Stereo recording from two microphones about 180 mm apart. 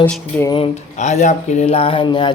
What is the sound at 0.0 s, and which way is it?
Speech, 10° left (ahead or behind).